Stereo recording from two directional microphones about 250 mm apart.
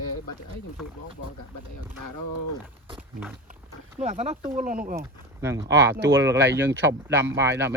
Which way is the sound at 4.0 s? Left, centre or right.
Right.